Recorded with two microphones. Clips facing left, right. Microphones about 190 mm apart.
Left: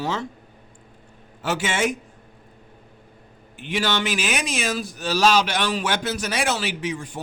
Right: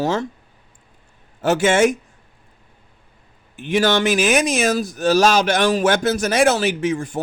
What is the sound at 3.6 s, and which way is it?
Speech, 45° right (ahead or behind).